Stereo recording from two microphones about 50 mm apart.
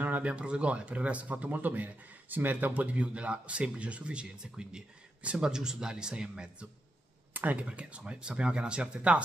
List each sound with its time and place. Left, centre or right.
0.2 s a man's voice: right